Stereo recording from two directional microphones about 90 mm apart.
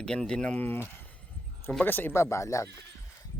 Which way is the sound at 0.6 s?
25° left (ahead or behind).